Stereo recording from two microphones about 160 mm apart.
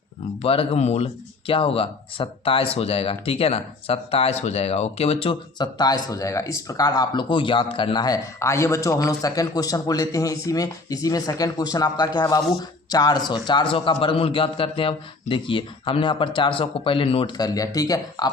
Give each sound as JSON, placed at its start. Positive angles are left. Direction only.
{"t": 0.4, "sound": "speech", "side_deg": 35}